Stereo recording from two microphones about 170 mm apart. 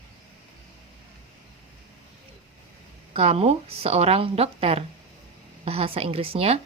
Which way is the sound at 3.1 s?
35° right (ahead or behind).